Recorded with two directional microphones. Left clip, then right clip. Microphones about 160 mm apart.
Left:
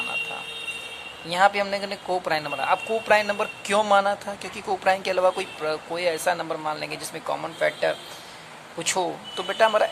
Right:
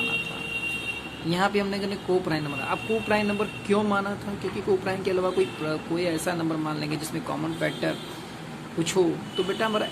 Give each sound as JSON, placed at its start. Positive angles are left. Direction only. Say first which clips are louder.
{"t": 1.3, "sound": "speech", "louder": "left 5 dB", "side_deg": 40}
{"t": 9.5, "sound": "speech", "louder": "left 8 dB", "side_deg": 50}